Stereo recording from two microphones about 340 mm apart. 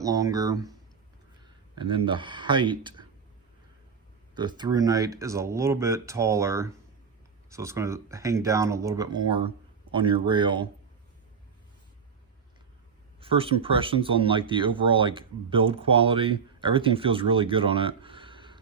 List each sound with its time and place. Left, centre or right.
0.0 s speech: centre
1.7 s speech: centre
4.4 s speech: centre
13.1 s speech: centre